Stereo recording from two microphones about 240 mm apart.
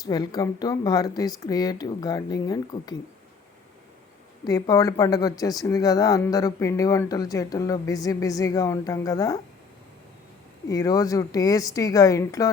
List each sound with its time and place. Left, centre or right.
0.0 s speech: centre
4.4 s speech: centre
10.7 s speech: centre